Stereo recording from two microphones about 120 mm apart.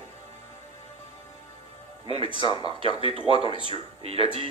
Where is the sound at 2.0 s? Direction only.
55° right (ahead or behind).